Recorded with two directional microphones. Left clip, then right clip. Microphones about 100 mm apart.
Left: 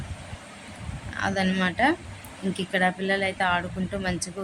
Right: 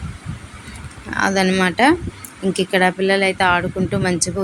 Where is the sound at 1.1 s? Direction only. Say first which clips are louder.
Right 9 dB; 35° right (ahead or behind).